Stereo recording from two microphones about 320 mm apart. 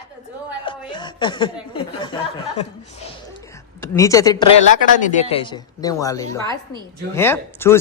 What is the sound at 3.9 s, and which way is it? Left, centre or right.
A man's voice, centre.